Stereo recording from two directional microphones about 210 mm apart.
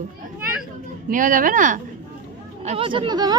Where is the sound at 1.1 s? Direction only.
40° right (ahead or behind).